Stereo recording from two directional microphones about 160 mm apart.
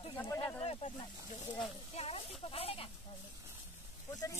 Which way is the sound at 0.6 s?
40° left (ahead or behind).